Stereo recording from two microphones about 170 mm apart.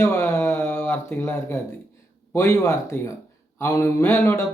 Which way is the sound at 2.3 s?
15° left (ahead or behind).